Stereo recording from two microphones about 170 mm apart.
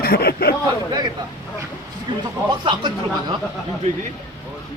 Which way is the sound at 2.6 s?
25° right (ahead or behind).